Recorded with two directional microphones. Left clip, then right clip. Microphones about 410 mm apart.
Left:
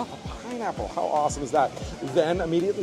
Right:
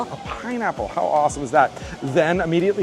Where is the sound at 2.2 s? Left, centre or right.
Right.